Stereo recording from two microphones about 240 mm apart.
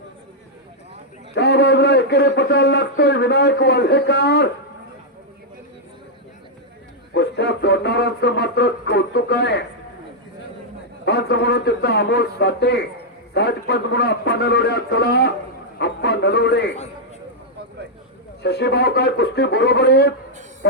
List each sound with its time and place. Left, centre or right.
1.4 s a man's voice: left
7.1 s a man's voice: left
11.0 s a man's voice: left
18.4 s a man's voice: left